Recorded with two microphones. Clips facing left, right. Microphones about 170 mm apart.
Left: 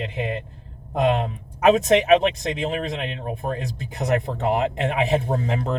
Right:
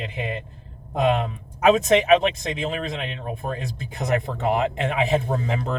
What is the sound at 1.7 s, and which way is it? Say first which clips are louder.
A man's voice: even; 65° left (ahead or behind).